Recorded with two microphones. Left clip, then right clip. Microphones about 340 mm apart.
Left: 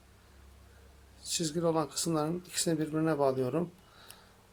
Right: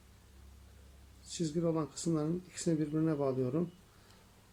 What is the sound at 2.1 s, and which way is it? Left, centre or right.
Speech, left.